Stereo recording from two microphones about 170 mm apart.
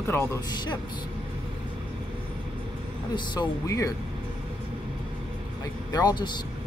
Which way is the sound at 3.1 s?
25° left (ahead or behind).